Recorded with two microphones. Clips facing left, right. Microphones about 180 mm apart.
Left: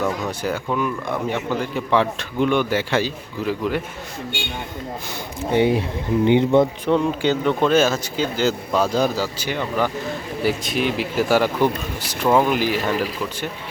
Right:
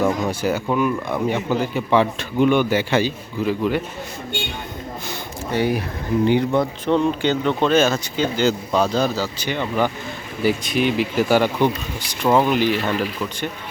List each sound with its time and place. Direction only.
0.0 s a man's voice: 5° right (ahead or behind)
5.5 s speech: 25° left (ahead or behind)
6.8 s a man's voice: 10° left (ahead or behind)